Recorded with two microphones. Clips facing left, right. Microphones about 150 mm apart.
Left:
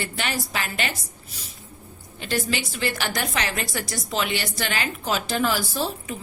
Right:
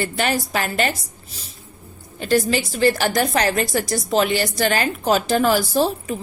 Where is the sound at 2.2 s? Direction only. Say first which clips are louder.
Right 8 dB; 40° right (ahead or behind).